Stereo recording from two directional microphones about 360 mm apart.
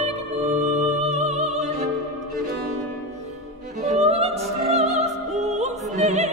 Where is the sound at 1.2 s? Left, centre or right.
Centre.